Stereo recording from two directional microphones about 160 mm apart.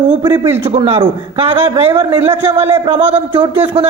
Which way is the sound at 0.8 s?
35° right (ahead or behind).